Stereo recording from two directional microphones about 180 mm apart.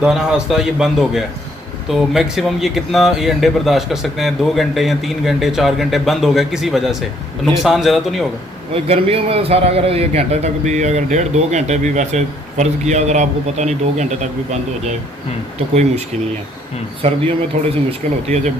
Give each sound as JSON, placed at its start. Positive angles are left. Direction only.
{"t": 0.0, "sound": "speech", "side_deg": -5}
{"t": 8.7, "sound": "a man's voice", "side_deg": -35}
{"t": 15.7, "sound": "a man's voice", "side_deg": -40}